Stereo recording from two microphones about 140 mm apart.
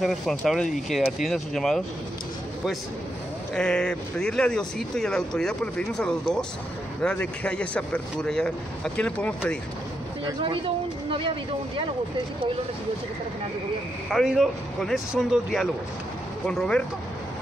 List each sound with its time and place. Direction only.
0.0 s speech: centre (ahead or behind)
3.5 s speech: 5° left (ahead or behind)
10.2 s speech: 40° right (ahead or behind)
14.1 s speech: centre (ahead or behind)